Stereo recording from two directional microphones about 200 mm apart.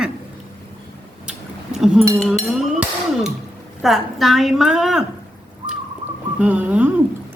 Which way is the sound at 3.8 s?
Centre (ahead or behind).